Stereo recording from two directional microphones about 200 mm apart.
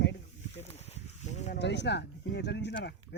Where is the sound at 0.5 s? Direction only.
30° left (ahead or behind).